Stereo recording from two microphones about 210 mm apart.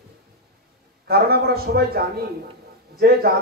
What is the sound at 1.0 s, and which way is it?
Speech, 50° right (ahead or behind).